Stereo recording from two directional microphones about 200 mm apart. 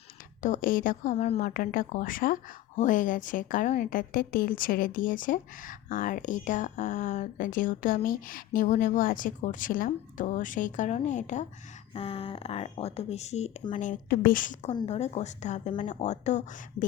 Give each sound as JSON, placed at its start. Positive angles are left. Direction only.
{"t": 0.4, "sound": "speech", "side_deg": 40}
{"t": 1.5, "sound": "speech", "side_deg": 45}